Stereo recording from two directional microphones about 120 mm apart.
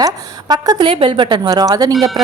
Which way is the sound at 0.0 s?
35° right (ahead or behind).